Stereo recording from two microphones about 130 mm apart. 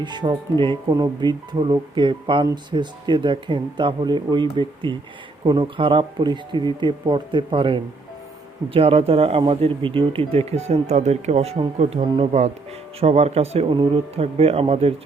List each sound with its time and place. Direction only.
0.0 s speech: 35° right (ahead or behind)